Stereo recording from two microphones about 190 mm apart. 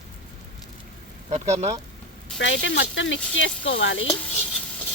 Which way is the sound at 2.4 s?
75° left (ahead or behind).